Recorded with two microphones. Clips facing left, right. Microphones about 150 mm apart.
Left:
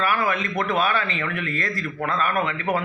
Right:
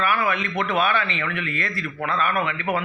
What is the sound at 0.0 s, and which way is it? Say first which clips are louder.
A man's voice: even; 40° left (ahead or behind).